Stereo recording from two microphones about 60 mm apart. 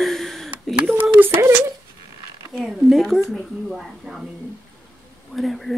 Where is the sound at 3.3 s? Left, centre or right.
Centre.